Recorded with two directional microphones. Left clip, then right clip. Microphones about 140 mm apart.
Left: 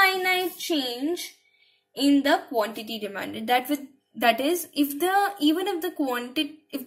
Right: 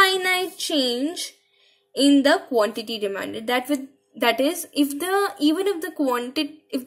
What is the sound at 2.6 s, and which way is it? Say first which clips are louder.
Speech: right 6 dB; 45° right (ahead or behind).